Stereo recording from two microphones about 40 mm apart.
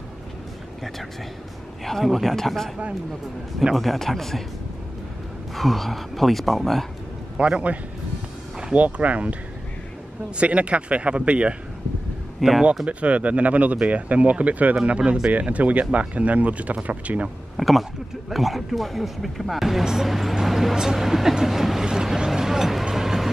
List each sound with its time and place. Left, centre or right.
2.0 s speech: centre
3.7 s speech: centre
5.5 s speech: centre
7.3 s a man's voice: right
8.7 s speech: right
12.4 s speech: centre
12.8 s speech: right
17.6 s speech: centre
20.1 s speech: centre
20.4 s a sound: centre
20.7 s speech: centre
22.8 s a sound: centre